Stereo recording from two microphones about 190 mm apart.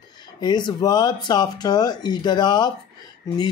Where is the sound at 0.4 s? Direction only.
20° left (ahead or behind).